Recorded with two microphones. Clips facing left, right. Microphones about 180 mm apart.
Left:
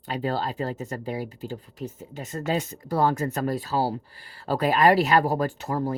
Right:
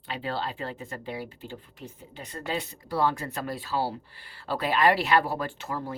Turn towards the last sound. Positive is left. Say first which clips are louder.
# left 7 dB
turn(degrees=40)  # may be behind; listen again after turning